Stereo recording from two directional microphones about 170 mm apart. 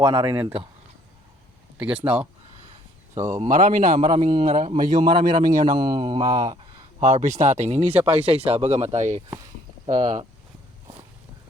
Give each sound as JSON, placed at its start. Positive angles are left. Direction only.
{"t": 0.0, "sound": "speech", "side_deg": -30}
{"t": 1.8, "sound": "speech", "side_deg": -10}
{"t": 3.2, "sound": "speech", "side_deg": -45}
{"t": 4.1, "sound": "speech", "side_deg": -30}
{"t": 4.5, "sound": "speech", "side_deg": -40}
{"t": 4.9, "sound": "speech", "side_deg": -25}
{"t": 7.0, "sound": "speech", "side_deg": -45}
{"t": 9.8, "sound": "speech", "side_deg": -30}